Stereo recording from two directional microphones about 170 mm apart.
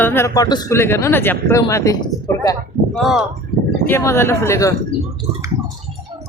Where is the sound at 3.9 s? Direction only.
15° left (ahead or behind).